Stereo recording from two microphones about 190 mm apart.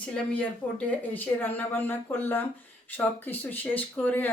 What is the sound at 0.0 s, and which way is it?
A woman's voice, 5° left (ahead or behind).